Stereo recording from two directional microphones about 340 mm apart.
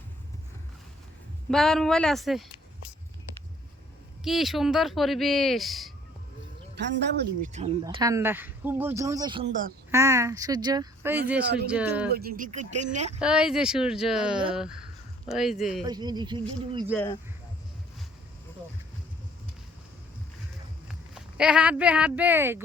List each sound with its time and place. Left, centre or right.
1.5 s speech: centre
4.2 s speech: centre
6.7 s speech: right
7.5 s speech: centre
9.9 s speech: centre
12.1 s speech: right
13.1 s speech: centre
15.8 s speech: centre
16.9 s speech: centre
20.8 s speech: centre